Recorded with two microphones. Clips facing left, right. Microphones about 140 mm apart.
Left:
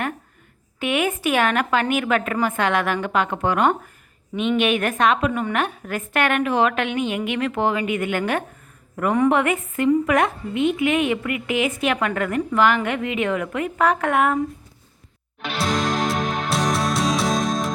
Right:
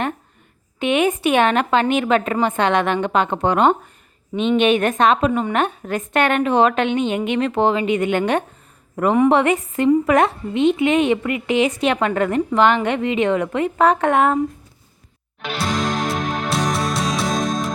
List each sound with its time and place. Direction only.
0.8 s a woman's voice: 25° right (ahead or behind)
15.4 s music: centre (ahead or behind)